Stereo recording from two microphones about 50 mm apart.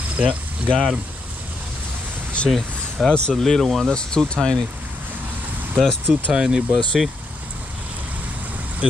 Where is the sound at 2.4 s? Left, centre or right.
Left.